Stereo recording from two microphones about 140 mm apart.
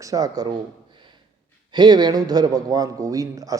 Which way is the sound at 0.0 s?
25° right (ahead or behind).